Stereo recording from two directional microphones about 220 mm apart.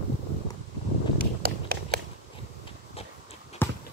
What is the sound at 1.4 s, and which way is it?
Run, 45° right (ahead or behind).